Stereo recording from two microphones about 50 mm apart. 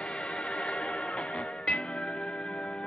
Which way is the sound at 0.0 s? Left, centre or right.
Left.